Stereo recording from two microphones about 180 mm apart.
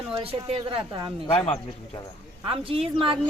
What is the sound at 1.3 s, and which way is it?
Speech, 30° left (ahead or behind).